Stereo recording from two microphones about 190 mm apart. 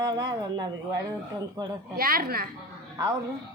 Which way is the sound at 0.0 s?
20° right (ahead or behind).